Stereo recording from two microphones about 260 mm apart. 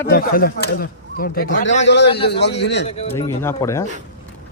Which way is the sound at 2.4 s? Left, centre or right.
Left.